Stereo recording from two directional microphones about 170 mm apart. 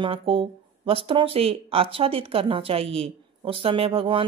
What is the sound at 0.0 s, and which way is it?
Speech, 30° right (ahead or behind).